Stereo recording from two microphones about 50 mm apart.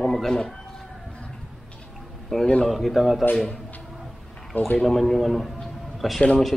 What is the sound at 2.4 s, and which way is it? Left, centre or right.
Speech, centre.